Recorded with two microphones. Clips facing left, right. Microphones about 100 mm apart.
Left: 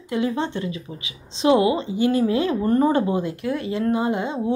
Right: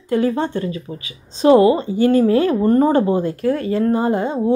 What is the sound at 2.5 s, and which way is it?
A woman's voice, 30° right (ahead or behind).